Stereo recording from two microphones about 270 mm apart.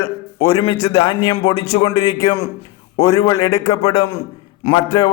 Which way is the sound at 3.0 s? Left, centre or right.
Left.